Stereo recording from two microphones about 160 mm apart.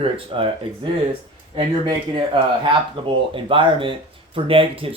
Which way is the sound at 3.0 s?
35° right (ahead or behind).